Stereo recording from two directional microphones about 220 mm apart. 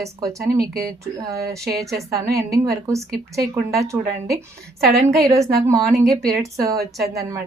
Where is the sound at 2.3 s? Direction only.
15° right (ahead or behind).